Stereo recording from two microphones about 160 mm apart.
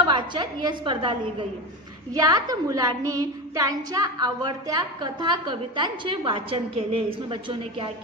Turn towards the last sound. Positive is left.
turn(degrees=-30)  # may be behind; listen again after turning